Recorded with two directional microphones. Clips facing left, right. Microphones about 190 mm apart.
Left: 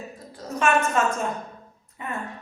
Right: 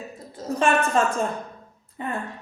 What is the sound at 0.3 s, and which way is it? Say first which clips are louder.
A woman's voice: right 1 dB; 30° right (ahead or behind).